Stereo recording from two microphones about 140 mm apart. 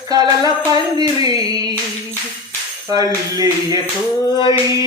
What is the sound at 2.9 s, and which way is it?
Music, 25° right (ahead or behind).